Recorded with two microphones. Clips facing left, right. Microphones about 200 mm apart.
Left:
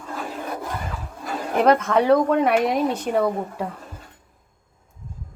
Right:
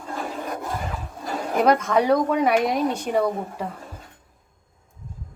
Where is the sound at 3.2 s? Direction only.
5° left (ahead or behind).